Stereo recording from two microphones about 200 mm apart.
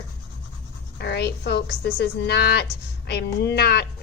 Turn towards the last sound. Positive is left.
turn(degrees=50)  # may be behind; listen again after turning